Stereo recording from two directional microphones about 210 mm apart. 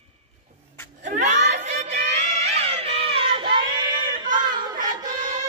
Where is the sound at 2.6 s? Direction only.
30° right (ahead or behind).